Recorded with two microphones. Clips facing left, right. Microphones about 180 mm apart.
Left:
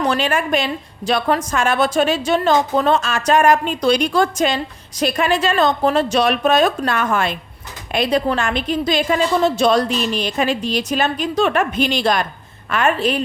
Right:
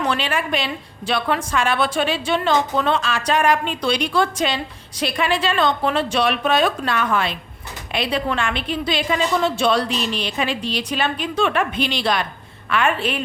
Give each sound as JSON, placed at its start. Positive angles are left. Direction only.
{"t": 0.0, "sound": "a woman's voice", "side_deg": 40}